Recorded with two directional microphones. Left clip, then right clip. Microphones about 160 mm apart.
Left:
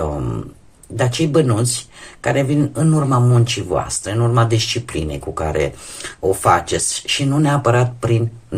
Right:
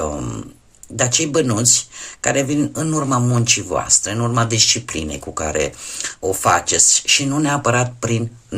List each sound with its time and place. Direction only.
0.9 s speech: 20° right (ahead or behind)